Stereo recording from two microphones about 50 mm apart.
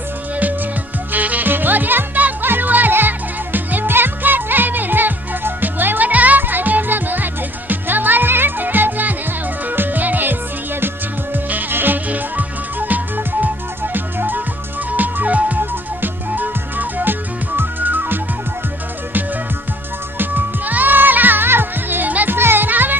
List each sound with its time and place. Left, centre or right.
0.3 s music: right
20.1 s music: right
22.4 s music: right